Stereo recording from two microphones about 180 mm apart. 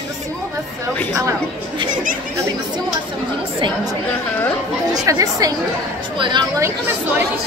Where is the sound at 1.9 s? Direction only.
50° right (ahead or behind).